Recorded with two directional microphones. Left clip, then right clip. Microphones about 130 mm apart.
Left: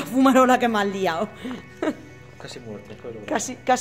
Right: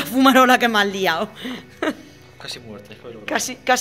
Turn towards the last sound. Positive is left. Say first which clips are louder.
# right 3 dB
turn(degrees=20)  # may be behind; listen again after turning